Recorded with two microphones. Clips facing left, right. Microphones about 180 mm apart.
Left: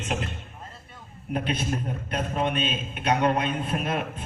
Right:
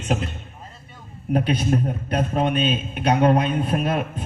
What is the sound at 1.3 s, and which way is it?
A man's voice, 35° right (ahead or behind).